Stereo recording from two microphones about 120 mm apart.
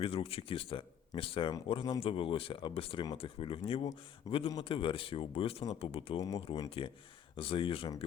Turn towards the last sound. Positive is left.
turn(degrees=50)  # may be behind; listen again after turning